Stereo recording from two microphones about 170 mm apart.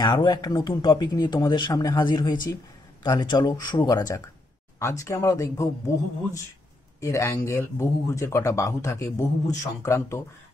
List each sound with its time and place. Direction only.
0.0 s speech: 25° left (ahead or behind)
7.0 s speech: 15° left (ahead or behind)